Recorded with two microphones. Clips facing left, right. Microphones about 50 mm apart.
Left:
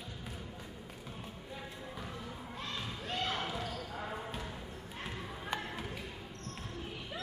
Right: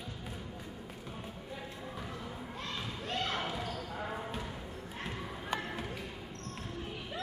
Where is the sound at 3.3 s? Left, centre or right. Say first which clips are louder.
Right 1 dB; centre.